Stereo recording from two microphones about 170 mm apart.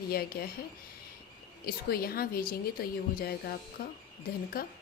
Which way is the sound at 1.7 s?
65° left (ahead or behind).